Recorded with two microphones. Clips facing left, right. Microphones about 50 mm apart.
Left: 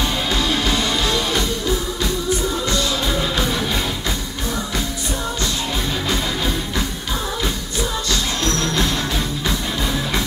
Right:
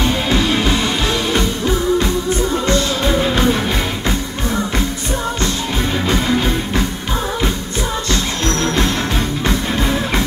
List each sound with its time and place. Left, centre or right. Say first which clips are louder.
0.0 s music: right 4 dB; right
2.6 s music: right 4 dB; right
6.0 s music: right 7 dB; right
8.1 s music: right 3 dB; right